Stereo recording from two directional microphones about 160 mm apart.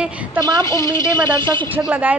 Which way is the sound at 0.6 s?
20° left (ahead or behind).